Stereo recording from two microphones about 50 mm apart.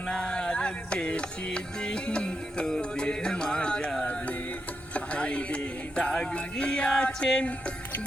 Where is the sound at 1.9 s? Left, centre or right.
Left.